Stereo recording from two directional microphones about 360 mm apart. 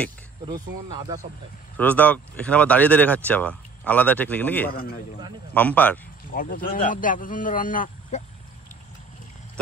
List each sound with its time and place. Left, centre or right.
0.5 s speech: centre
1.8 s speech: centre
4.6 s speech: left
5.5 s speech: centre
6.3 s speech: left